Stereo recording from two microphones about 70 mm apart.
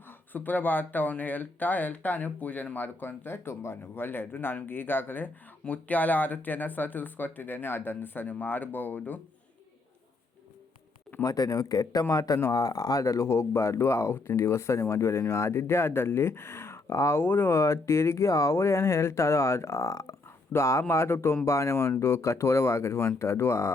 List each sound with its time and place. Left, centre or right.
0.3 s speech: left
11.2 s speech: left
17.2 s speech: left
20.5 s speech: left